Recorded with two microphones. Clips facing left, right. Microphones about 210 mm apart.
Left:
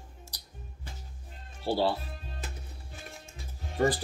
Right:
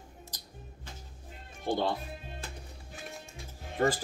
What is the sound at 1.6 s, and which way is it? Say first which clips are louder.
Speech: left 3 dB; 5° left (ahead or behind).